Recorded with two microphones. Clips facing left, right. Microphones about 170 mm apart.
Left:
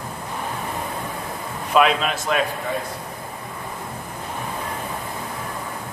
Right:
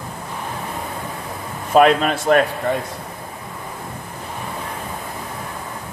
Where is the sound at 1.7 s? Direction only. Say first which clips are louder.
Right 5 dB; 45° right (ahead or behind).